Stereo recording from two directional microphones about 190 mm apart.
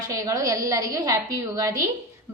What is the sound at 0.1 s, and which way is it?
A woman's voice, 15° right (ahead or behind).